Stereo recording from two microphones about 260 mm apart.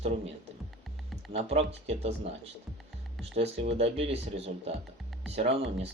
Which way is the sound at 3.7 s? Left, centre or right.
Right.